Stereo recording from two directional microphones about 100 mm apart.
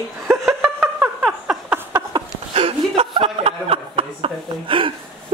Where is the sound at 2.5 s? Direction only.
70° right (ahead or behind).